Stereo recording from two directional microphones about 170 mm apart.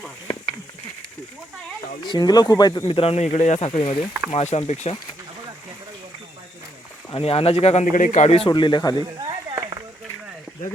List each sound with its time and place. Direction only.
2.0 s speech: 25° left (ahead or behind); by 4.9 s 40° left (ahead or behind)
7.1 s speech: 35° left (ahead or behind)
9.0 s a sound: 25° right (ahead or behind)